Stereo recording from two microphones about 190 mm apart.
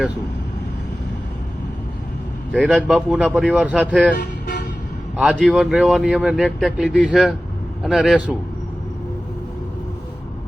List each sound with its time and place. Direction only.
2.6 s speech: 5° right (ahead or behind)
4.2 s toot: 60° left (ahead or behind)
5.1 s speech: 5° right (ahead or behind)